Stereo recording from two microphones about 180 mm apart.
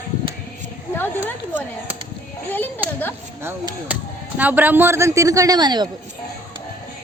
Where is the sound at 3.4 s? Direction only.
15° right (ahead or behind).